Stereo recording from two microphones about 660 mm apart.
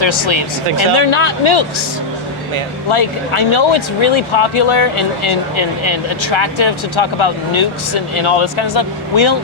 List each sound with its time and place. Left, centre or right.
0.0 s speech: left
2.9 s speech: left